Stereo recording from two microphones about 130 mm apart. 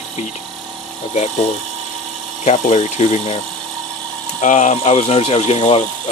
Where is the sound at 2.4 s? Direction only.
60° left (ahead or behind).